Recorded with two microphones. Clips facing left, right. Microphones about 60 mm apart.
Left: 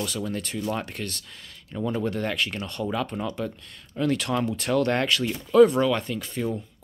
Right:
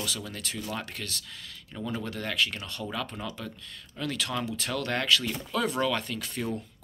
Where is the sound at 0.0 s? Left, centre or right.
Left.